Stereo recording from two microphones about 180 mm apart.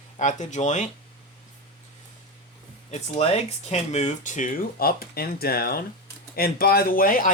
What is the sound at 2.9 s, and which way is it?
Speech, 35° left (ahead or behind).